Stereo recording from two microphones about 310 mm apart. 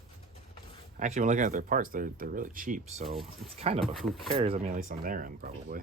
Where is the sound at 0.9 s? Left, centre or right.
Right.